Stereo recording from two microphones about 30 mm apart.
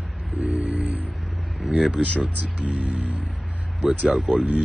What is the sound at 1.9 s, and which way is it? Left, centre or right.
Speech, left.